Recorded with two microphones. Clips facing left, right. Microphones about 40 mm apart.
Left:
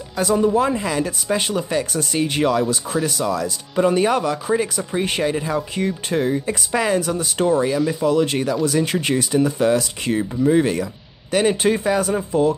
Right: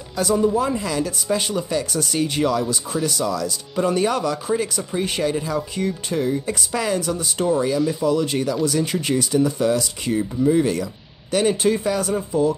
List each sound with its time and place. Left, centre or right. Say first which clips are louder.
0.2 s speech: left 2 dB; left
7.6 s speech: left 1 dB; left
8.0 s speech: left 2 dB; left
8.8 s speech: left 1 dB; left
11.3 s speech: left 1 dB; left
12.3 s speech: left 1 dB; left